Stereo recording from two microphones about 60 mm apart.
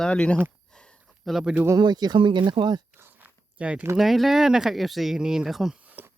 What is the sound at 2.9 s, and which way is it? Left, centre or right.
Biting, right.